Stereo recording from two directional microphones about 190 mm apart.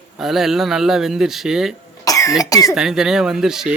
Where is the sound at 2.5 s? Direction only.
20° left (ahead or behind).